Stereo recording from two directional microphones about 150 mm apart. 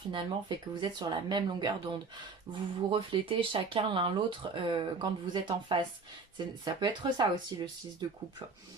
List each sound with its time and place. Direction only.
0.1 s speech: 30° right (ahead or behind)